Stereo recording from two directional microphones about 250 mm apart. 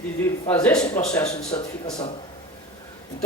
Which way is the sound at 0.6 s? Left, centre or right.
Centre.